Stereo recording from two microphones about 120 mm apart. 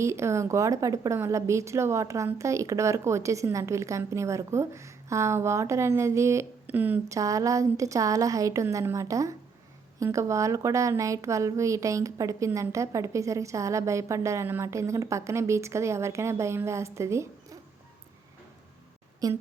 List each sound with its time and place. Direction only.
0.0 s a woman's voice: 25° right (ahead or behind)
7.1 s a woman's voice: 25° right (ahead or behind)
19.2 s a woman's voice: 30° right (ahead or behind)